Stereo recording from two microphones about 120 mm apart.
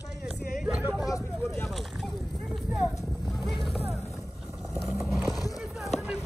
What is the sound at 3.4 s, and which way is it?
Speech, centre (ahead or behind).